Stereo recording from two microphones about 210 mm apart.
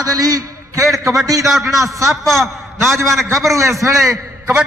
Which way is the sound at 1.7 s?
15° right (ahead or behind).